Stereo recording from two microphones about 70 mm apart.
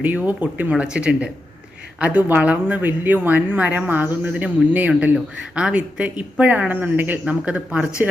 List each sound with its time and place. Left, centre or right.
0.0 s speech: right